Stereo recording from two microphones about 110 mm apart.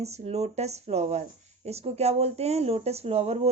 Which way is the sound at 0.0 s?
75° right (ahead or behind).